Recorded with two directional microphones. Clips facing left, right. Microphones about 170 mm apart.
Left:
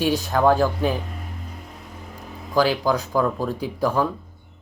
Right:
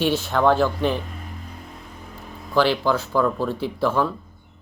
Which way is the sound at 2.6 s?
10° left (ahead or behind).